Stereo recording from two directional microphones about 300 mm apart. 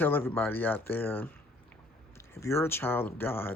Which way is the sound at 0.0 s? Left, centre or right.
Centre.